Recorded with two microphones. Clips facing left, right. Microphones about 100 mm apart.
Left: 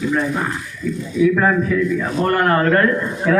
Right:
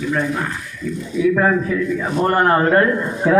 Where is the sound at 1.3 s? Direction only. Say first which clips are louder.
Even; 10° right (ahead or behind).